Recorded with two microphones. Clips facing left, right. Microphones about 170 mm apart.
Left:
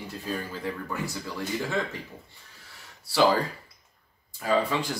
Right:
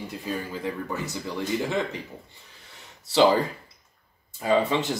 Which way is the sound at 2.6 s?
20° right (ahead or behind).